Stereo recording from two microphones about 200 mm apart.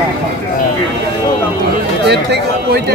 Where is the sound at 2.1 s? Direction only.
55° right (ahead or behind).